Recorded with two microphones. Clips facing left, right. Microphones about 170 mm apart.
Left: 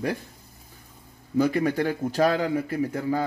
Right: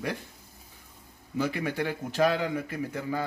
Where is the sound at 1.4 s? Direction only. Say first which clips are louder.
Left 7 dB; 40° left (ahead or behind).